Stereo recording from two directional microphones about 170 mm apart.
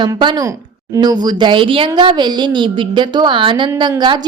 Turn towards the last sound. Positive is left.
turn(degrees=-25)  # may be behind; listen again after turning